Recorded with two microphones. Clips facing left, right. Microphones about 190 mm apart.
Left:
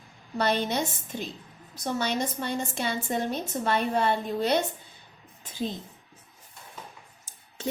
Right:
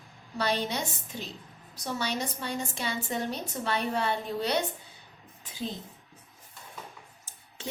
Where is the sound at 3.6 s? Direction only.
50° left (ahead or behind).